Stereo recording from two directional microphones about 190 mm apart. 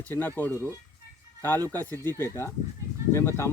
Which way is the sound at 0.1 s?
10° left (ahead or behind).